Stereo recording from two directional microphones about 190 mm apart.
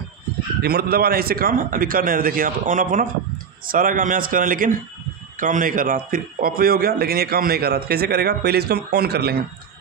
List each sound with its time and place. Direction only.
0.6 s a man's voice: 55° right (ahead or behind)